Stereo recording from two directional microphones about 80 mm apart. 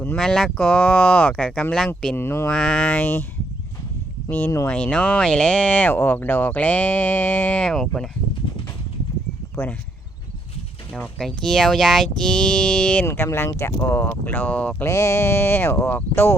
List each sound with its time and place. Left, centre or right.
0.2 s speech: centre
2.1 s speech: left
2.5 s speech: centre; by 3.2 s left
4.3 s speech: left
4.7 s speech: centre
7.6 s speech: centre
9.6 s speech: left
11.2 s speech: centre
13.1 s speech: left; by 14.8 s centre
14.8 s speech: left